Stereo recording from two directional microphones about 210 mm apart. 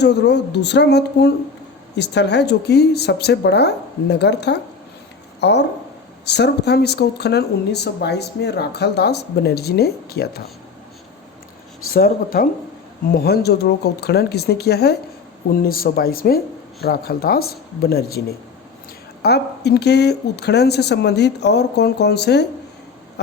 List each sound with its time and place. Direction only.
0.0 s speech: 55° left (ahead or behind)
11.9 s speech: 45° left (ahead or behind)